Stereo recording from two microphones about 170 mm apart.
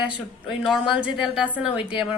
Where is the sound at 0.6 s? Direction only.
Centre (ahead or behind).